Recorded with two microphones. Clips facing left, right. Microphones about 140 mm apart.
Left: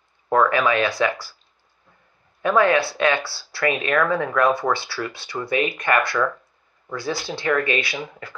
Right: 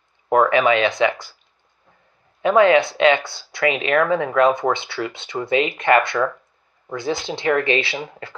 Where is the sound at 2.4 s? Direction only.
20° right (ahead or behind).